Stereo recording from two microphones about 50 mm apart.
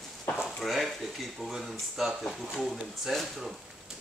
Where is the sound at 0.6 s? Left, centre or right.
Centre.